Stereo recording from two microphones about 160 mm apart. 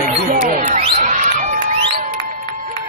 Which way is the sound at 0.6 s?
45° right (ahead or behind).